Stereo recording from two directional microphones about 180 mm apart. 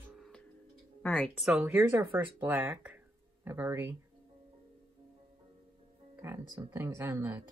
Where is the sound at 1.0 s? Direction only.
5° left (ahead or behind).